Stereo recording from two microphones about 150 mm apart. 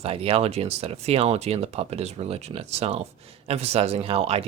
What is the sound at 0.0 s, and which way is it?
Speech, 40° right (ahead or behind).